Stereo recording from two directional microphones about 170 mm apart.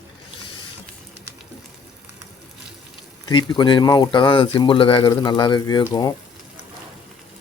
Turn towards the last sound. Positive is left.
turn(degrees=25)  # may be behind; listen again after turning